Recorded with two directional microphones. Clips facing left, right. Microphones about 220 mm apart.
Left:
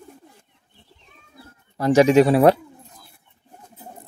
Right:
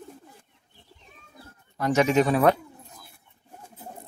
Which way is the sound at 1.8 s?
35° left (ahead or behind).